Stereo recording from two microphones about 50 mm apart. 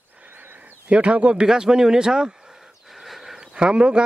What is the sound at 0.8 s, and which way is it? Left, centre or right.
Speech, right.